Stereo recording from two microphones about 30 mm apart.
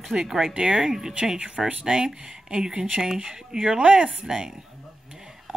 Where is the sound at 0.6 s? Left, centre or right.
Right.